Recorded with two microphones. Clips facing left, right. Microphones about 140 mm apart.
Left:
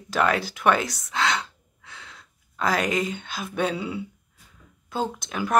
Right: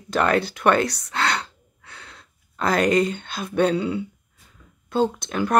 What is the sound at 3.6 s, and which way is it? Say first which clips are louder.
Speech: right 6 dB; 5° left (ahead or behind).